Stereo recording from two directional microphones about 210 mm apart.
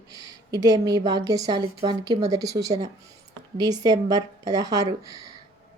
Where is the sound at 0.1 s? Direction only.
15° right (ahead or behind).